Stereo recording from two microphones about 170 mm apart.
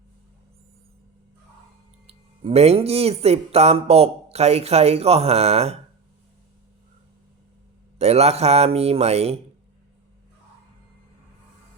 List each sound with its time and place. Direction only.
2.0 s speech: 35° right (ahead or behind)
7.9 s speech: 40° right (ahead or behind)